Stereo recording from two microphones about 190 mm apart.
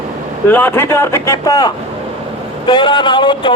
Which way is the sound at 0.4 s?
10° left (ahead or behind).